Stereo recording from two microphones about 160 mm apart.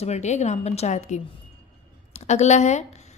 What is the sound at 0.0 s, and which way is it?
A woman's voice, 45° left (ahead or behind).